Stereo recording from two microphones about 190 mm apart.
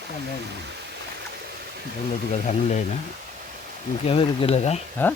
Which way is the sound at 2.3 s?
40° left (ahead or behind).